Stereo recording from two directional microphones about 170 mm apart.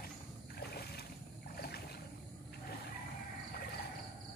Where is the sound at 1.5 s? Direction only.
65° left (ahead or behind).